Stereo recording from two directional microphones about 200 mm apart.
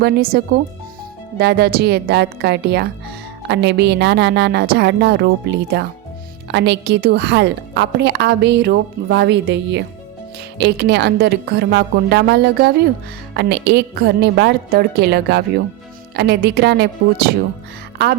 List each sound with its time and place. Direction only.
0.0 s a woman's voice: 50° right (ahead or behind)